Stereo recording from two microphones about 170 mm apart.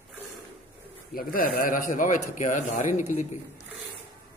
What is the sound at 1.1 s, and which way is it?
A man's voice, 60° left (ahead or behind).